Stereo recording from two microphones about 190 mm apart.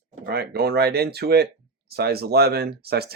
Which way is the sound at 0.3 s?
55° right (ahead or behind).